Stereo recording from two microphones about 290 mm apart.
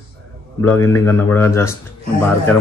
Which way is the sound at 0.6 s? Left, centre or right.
Centre.